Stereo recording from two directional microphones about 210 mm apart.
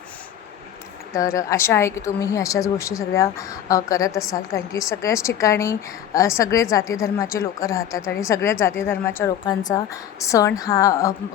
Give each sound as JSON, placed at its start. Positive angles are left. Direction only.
{"t": 1.1, "sound": "a woman's voice", "side_deg": 15}